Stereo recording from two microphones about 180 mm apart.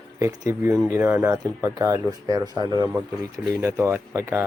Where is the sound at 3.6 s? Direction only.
15° right (ahead or behind).